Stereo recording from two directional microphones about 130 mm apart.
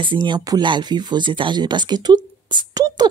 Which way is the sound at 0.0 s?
35° right (ahead or behind).